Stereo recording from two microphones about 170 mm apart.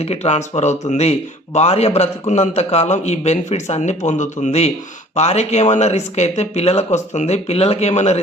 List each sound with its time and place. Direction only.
0.0 s a man's voice: 40° left (ahead or behind)